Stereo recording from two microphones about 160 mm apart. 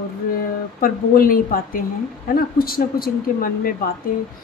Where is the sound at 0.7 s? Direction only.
60° left (ahead or behind).